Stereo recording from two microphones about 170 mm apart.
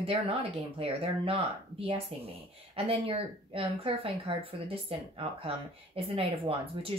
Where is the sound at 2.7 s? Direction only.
35° right (ahead or behind).